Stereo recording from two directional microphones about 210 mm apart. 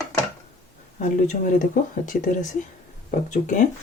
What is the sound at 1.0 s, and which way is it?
Speech, 35° left (ahead or behind).